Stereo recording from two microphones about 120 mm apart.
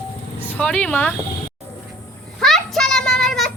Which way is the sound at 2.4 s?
5° left (ahead or behind).